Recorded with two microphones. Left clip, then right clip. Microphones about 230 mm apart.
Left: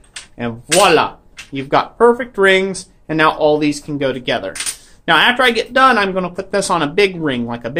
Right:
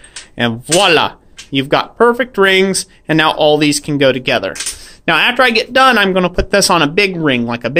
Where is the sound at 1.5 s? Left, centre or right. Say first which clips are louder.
Right 3 dB; right.